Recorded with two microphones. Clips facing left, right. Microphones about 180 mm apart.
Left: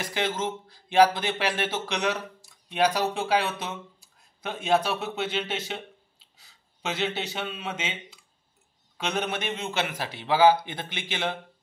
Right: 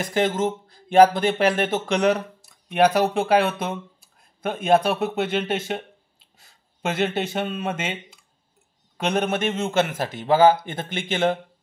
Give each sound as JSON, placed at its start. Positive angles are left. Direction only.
{"t": 0.0, "sound": "a man's voice", "side_deg": -50}